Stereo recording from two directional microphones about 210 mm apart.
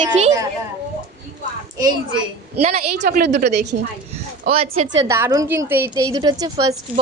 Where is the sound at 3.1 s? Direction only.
45° right (ahead or behind).